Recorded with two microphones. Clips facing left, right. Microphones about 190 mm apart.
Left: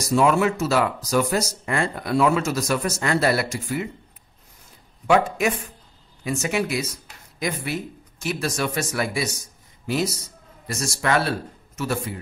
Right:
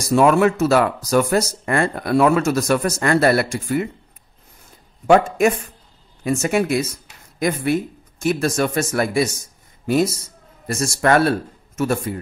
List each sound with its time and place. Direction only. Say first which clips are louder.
0.1 s speech: right 4 dB; 55° right (ahead or behind)
5.0 s speech: right 5 dB; 45° right (ahead or behind)